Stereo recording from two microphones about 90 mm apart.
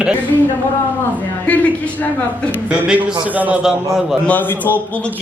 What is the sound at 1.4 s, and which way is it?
Speech, 15° left (ahead or behind).